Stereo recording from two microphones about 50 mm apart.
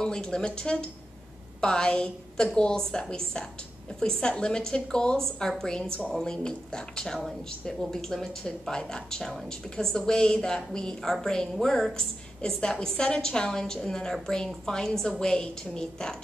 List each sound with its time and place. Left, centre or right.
0.0 s speech: centre